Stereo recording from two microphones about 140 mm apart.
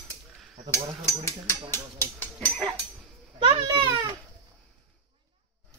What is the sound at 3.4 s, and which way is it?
Speech, 35° right (ahead or behind).